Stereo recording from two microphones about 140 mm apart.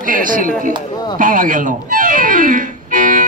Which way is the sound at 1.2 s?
75° right (ahead or behind).